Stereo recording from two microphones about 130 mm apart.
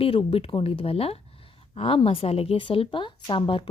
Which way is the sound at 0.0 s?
45° left (ahead or behind).